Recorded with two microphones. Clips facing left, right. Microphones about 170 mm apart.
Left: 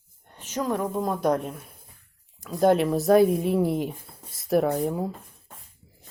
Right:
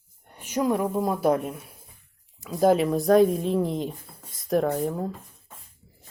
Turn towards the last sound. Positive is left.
turn(degrees=10)  # may be behind; listen again after turning